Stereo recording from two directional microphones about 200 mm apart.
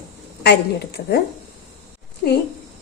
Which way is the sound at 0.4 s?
55° left (ahead or behind).